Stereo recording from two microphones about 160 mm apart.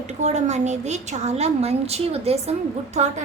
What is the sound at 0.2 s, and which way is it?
Child singing, 45° right (ahead or behind).